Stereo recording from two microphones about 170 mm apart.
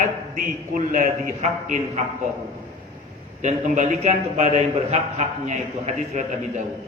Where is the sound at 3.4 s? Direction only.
45° right (ahead or behind).